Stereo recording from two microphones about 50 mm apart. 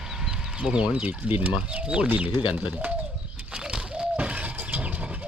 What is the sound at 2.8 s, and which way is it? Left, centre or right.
Pigeon, right.